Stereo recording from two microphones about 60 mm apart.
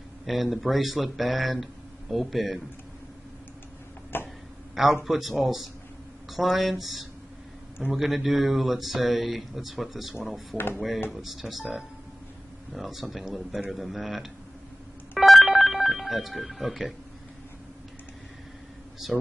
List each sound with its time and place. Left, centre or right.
0.3 s speech: centre
4.1 s throat clearing: left
5.0 s speech: centre
15.1 s a sound: centre
19.0 s speech: centre